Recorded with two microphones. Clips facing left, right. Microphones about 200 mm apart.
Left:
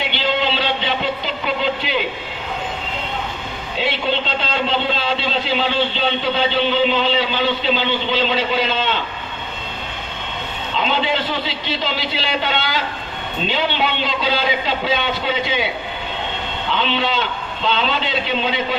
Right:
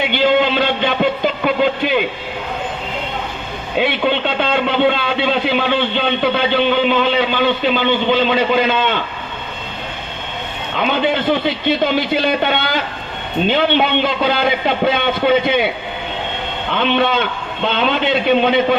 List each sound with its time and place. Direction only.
0.0 s music: 50° right (ahead or behind)
3.8 s a man's voice: 55° right (ahead or behind)
10.8 s a man's voice: 55° right (ahead or behind)
16.7 s a man's voice: 55° right (ahead or behind)